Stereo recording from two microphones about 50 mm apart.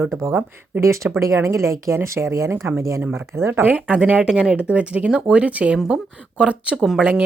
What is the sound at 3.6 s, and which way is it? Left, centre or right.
Speech, right.